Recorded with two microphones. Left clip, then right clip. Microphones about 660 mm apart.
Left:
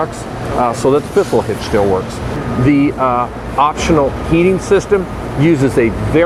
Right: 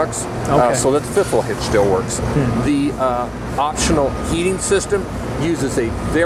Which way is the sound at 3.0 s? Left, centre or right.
Left.